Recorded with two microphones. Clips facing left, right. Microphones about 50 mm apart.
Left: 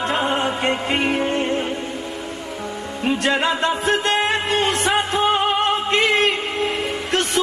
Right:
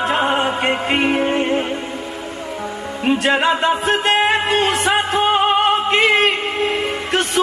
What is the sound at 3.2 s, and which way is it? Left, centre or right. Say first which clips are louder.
Music: right 3 dB; centre.